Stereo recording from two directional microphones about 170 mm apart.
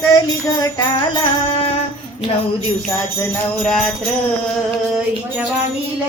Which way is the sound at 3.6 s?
5° left (ahead or behind).